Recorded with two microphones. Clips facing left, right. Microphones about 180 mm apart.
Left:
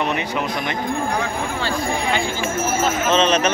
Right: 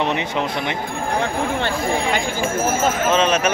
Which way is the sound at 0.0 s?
25° right (ahead or behind).